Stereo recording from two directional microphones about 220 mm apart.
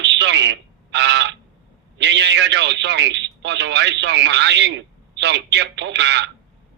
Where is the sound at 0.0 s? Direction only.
55° right (ahead or behind).